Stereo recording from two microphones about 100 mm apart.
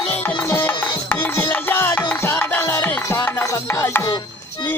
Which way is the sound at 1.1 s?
20° left (ahead or behind).